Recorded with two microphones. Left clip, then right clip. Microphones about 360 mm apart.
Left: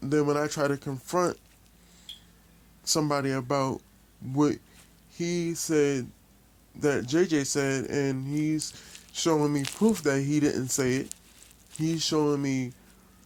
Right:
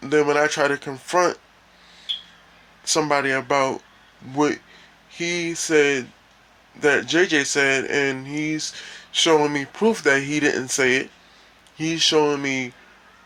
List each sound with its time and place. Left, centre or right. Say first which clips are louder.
0.0 s speech: right 8 dB; left
2.8 s speech: right 7 dB; left